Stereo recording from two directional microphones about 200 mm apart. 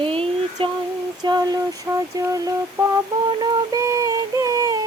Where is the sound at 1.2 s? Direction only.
20° right (ahead or behind).